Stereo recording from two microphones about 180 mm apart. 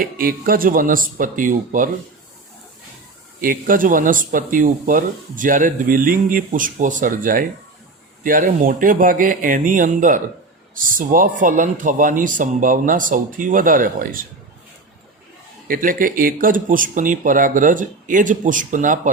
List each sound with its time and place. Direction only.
0.0 s speech: 50° right (ahead or behind)
3.4 s speech: 50° right (ahead or behind)
15.6 s speech: 50° right (ahead or behind)